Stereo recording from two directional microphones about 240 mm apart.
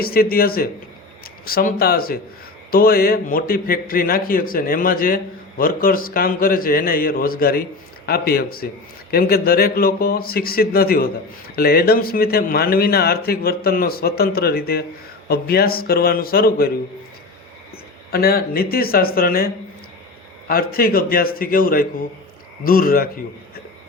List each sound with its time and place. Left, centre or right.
0.0 s a man's voice: left
18.1 s a man's voice: left
20.5 s a man's voice: left